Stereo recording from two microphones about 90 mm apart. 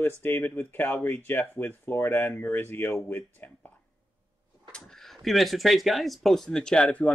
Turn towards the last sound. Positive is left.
turn(degrees=15)  # may be behind; listen again after turning